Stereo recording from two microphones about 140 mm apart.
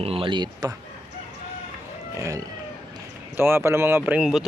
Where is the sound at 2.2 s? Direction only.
25° right (ahead or behind).